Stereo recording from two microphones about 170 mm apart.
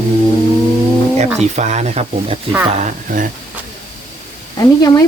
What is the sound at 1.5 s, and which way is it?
Speech, 40° right (ahead or behind).